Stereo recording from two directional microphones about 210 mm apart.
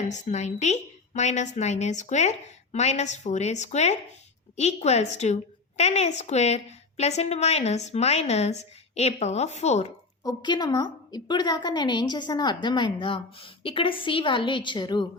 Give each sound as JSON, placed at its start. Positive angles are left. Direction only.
{"t": 0.0, "sound": "a woman's voice", "side_deg": 35}
{"t": 10.2, "sound": "a woman's voice", "side_deg": 20}